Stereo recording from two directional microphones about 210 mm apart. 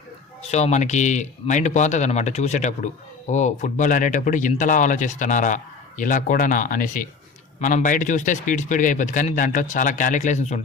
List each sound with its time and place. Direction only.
0.4 s speech: 30° left (ahead or behind)